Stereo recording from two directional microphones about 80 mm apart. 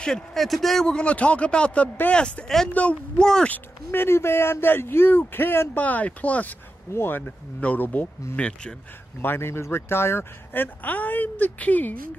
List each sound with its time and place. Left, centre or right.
0.0 s speech: centre
3.4 s speech: left
9.2 s speech: left